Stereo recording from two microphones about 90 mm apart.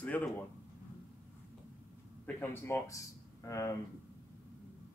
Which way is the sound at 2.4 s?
25° left (ahead or behind).